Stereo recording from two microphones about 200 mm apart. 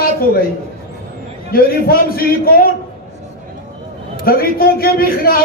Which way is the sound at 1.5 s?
50° left (ahead or behind).